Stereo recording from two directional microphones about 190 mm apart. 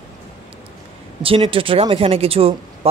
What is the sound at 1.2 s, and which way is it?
Speech, 30° right (ahead or behind).